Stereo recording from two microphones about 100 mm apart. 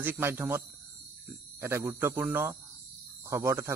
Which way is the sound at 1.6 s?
25° right (ahead or behind).